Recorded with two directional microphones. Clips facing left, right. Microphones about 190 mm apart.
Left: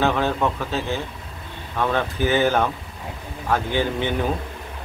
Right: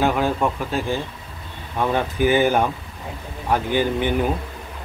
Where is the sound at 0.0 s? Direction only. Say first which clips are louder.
Right 1 dB; 10° right (ahead or behind).